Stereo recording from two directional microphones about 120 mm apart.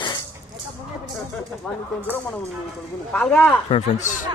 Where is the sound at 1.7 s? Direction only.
10° left (ahead or behind).